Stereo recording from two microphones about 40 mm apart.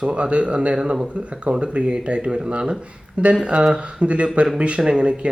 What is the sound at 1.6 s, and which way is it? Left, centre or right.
Speech, right.